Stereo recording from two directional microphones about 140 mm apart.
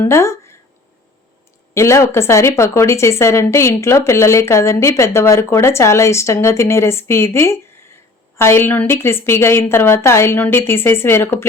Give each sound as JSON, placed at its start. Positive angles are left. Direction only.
{"t": 0.0, "sound": "speech", "side_deg": 20}
{"t": 1.7, "sound": "a woman's voice", "side_deg": 20}